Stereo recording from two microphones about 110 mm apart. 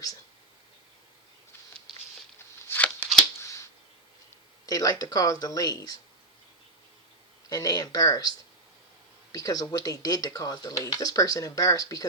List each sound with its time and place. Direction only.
2.6 s shuffling cards: 15° left (ahead or behind)
4.6 s speech: 35° left (ahead or behind)
7.5 s speech: 35° left (ahead or behind)
9.3 s speech: 35° left (ahead or behind)